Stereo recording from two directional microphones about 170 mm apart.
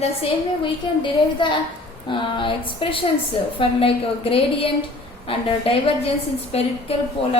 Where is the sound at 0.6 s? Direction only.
30° left (ahead or behind).